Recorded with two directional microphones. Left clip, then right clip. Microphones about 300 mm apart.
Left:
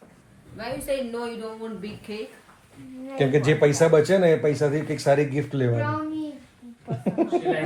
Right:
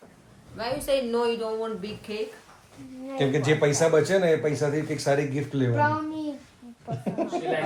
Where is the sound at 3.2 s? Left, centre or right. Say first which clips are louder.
Left 3 dB; left.